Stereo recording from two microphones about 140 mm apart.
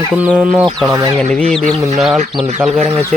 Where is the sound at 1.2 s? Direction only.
5° left (ahead or behind).